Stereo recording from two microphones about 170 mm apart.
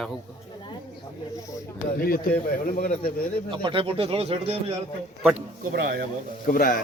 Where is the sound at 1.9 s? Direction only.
60° left (ahead or behind).